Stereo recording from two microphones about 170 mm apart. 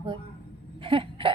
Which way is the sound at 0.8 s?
30° right (ahead or behind).